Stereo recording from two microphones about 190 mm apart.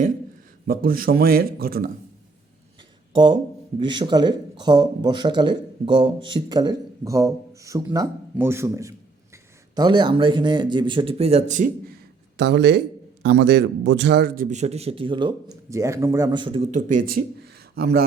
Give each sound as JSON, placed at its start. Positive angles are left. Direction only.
{"t": 0.7, "sound": "speech", "side_deg": -50}
{"t": 3.1, "sound": "speech", "side_deg": -25}
{"t": 12.4, "sound": "a man's voice", "side_deg": -65}
{"t": 16.7, "sound": "speech", "side_deg": -45}